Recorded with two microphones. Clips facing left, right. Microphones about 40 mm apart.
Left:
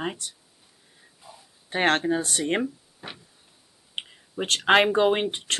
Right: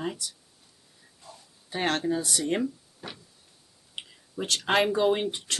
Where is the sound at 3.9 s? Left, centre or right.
Left.